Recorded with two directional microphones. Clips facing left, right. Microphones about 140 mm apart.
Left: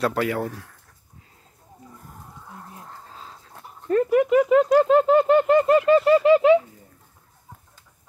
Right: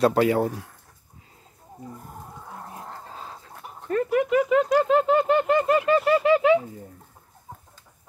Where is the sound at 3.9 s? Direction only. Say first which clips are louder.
Left 4 dB; 35° left (ahead or behind).